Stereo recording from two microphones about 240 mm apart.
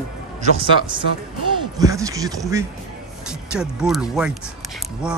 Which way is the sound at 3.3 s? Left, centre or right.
Centre.